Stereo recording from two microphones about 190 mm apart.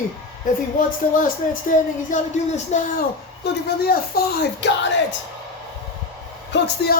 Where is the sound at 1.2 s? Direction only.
45° left (ahead or behind).